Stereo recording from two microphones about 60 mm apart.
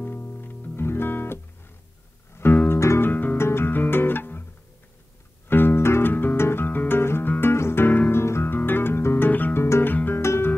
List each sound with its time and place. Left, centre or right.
0.0 s music: left
2.7 s music: left
3.1 s music: left
3.3 s music: left
5.5 s music: left
8.1 s guitar: left
8.5 s music: left
10.2 s music: left